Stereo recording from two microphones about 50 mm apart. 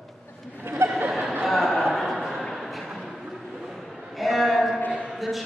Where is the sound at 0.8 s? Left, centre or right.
Right.